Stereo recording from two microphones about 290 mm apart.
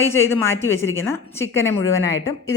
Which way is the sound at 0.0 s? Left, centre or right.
Centre.